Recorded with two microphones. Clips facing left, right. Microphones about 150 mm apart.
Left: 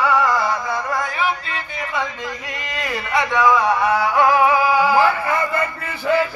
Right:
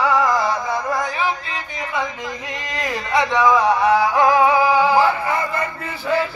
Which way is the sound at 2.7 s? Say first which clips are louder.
Right 1 dB; 20° right (ahead or behind).